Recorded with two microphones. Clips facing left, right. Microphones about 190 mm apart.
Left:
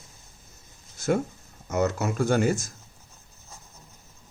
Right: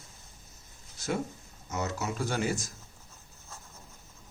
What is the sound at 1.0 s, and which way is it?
Speech, 50° left (ahead or behind).